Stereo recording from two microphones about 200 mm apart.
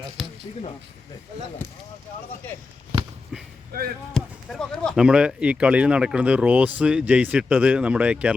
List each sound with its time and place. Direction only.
0.2 s a sound: centre (ahead or behind)
3.7 s speech: 50° right (ahead or behind)
4.1 s speech: centre (ahead or behind)